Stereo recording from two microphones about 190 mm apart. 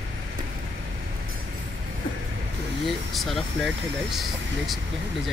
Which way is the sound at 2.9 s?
Centre (ahead or behind).